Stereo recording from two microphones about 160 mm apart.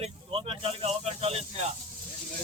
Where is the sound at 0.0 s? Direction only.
35° right (ahead or behind).